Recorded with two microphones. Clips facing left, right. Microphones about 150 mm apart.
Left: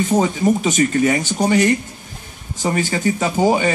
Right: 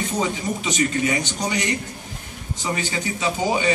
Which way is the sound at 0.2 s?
50° left (ahead or behind).